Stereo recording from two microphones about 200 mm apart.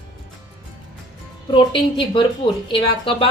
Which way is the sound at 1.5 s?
25° left (ahead or behind).